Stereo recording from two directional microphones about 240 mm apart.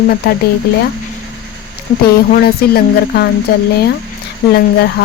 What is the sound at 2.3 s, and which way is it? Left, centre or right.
Speech, left.